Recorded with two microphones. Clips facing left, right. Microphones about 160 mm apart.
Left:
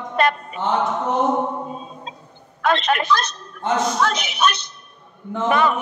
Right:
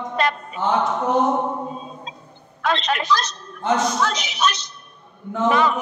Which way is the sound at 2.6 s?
55° left (ahead or behind).